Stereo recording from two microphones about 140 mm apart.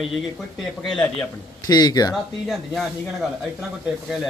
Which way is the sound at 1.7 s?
30° left (ahead or behind).